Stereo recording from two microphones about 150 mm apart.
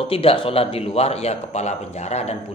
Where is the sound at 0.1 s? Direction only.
40° left (ahead or behind).